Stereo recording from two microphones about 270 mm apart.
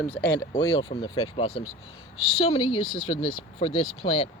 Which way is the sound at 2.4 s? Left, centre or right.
Centre.